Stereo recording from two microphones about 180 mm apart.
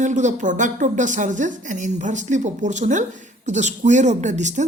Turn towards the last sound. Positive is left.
turn(degrees=-40)  # may be behind; listen again after turning